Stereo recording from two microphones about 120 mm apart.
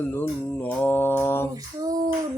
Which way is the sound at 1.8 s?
30° right (ahead or behind).